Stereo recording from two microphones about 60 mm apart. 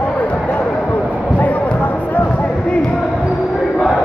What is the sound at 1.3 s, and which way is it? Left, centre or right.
Basketball bounce, left.